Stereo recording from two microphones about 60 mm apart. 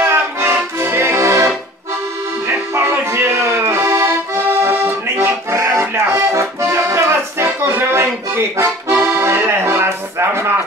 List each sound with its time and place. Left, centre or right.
0.0 s accordion: right
0.8 s music: right
2.4 s accordion: right
5.6 s accordion: right